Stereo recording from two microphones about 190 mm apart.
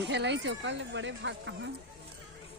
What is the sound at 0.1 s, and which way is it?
Speech, 65° right (ahead or behind).